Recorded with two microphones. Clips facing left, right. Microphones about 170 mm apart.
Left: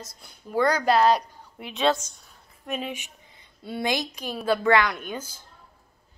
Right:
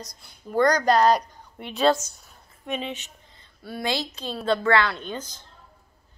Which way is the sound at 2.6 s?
5° left (ahead or behind).